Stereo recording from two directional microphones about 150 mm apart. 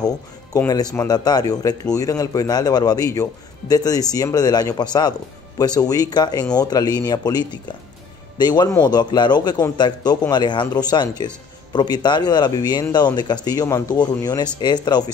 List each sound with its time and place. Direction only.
0.5 s speech: 25° left (ahead or behind)